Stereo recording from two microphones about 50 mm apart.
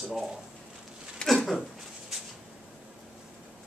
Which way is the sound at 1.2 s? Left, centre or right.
Centre.